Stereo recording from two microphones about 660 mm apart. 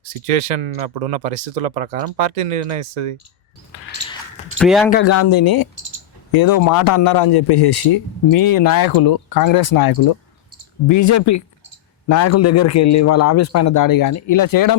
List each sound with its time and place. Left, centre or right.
0.3 s speech: right
4.5 s a man's voice: centre
4.9 s a man's voice: centre